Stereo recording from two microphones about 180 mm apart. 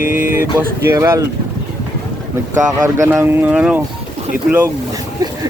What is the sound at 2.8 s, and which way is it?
Speech, 15° right (ahead or behind).